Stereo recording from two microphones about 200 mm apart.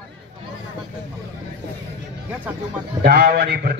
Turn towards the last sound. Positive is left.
turn(degrees=-50)  # may be behind; listen again after turning